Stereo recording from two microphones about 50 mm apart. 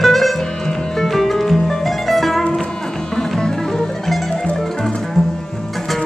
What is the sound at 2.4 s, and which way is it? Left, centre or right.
Music, centre.